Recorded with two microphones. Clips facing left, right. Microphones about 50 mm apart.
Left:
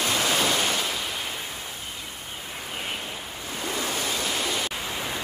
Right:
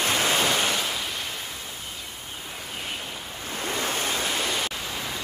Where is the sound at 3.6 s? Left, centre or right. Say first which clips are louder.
Right 1 dB; right.